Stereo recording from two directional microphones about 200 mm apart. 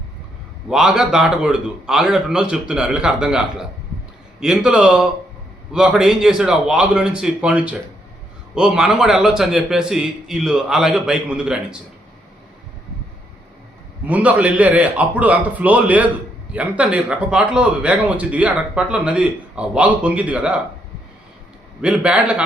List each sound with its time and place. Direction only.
0.7 s a man's voice: 5° right (ahead or behind)
14.1 s a man's voice: 5° right (ahead or behind)
21.8 s a man's voice: 5° right (ahead or behind)